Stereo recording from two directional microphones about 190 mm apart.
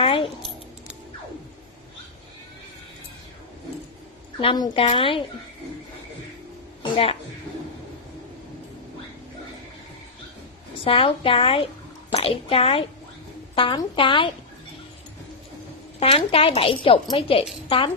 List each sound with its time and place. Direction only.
0.0 s keys jangling: 30° left (ahead or behind)
4.4 s speech: 30° left (ahead or behind)
6.8 s music: 30° left (ahead or behind)
10.8 s a child's voice: 30° left (ahead or behind)
16.0 s a woman's voice: 30° left (ahead or behind)